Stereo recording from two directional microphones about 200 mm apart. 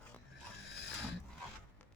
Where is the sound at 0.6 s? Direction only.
55° left (ahead or behind).